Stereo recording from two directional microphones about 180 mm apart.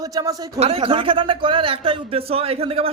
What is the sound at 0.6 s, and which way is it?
A man's voice, 30° right (ahead or behind).